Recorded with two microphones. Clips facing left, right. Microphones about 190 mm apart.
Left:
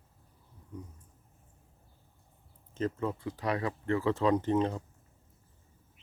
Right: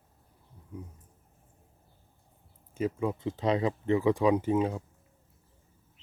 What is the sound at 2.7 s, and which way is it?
Speech, 10° right (ahead or behind).